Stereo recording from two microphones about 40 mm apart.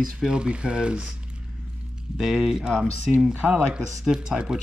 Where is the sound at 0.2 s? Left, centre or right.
Right.